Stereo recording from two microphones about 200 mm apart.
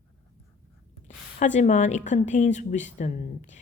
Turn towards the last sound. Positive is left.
turn(degrees=35)  # may be behind; listen again after turning